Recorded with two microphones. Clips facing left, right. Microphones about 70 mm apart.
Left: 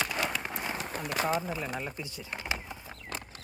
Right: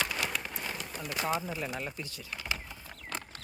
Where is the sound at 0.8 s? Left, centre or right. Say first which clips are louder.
Left 5 dB; left.